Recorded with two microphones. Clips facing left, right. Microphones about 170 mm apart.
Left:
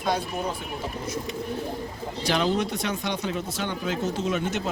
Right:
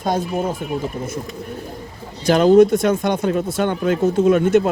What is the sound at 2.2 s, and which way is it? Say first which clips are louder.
Speech: right 13 dB; 45° right (ahead or behind).